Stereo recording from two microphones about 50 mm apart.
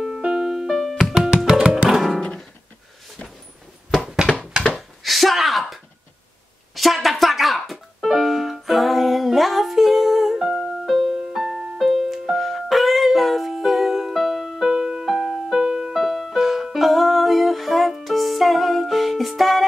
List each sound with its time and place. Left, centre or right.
0.2 s music: centre
4.7 s a sound: centre
8.0 s music: centre